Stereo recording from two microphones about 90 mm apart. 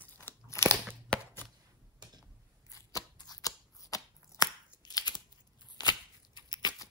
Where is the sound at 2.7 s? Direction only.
45° left (ahead or behind).